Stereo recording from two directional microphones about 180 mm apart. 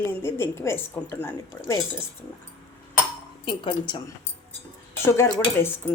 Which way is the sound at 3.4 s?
25° left (ahead or behind).